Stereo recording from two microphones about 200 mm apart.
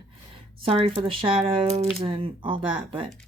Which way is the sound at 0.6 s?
30° right (ahead or behind).